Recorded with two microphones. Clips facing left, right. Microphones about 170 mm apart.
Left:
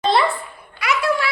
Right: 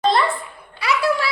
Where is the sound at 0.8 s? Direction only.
35° right (ahead or behind).